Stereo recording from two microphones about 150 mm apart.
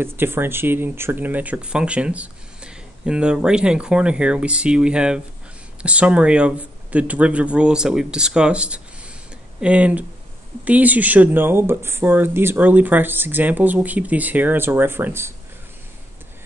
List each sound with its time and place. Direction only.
0.0 s speech: 15° right (ahead or behind)